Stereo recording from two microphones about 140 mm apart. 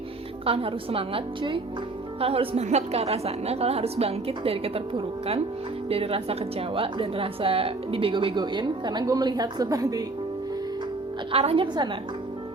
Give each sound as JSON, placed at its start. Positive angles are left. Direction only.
{"t": 0.4, "sound": "a woman's voice", "side_deg": -40}
{"t": 11.3, "sound": "a woman's voice", "side_deg": -45}